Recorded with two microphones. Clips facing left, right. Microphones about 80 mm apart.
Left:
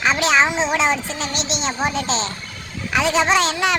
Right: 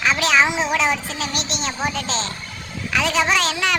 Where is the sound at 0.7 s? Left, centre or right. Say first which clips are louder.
Left 1 dB; left.